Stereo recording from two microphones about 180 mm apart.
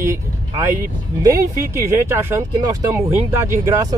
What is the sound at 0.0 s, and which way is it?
Speech, 15° right (ahead or behind).